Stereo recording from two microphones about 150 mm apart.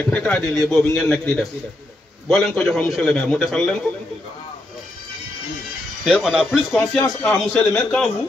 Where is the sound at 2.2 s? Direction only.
5° left (ahead or behind).